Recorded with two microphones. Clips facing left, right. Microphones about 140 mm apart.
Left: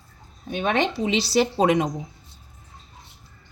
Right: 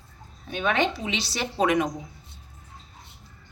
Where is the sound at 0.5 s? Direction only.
40° left (ahead or behind).